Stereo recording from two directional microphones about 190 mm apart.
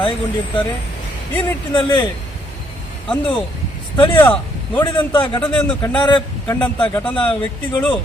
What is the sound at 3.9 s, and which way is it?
Speech, 25° left (ahead or behind).